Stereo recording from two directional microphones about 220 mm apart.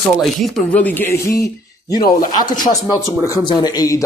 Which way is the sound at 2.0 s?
40° left (ahead or behind).